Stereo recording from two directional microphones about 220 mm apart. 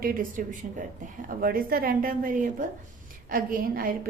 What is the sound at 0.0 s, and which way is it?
A woman's voice, 40° right (ahead or behind).